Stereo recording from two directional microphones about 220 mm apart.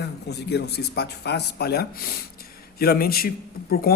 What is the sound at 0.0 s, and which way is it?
A man's voice, 50° left (ahead or behind).